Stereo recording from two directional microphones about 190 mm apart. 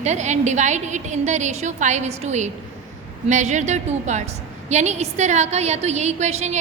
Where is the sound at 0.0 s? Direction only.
40° right (ahead or behind).